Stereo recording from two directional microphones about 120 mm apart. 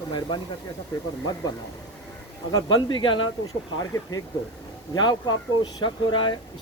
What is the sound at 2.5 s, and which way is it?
Speech, 40° left (ahead or behind).